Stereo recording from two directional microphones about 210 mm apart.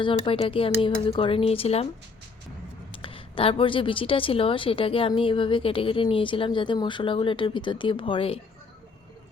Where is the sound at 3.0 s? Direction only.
25° left (ahead or behind).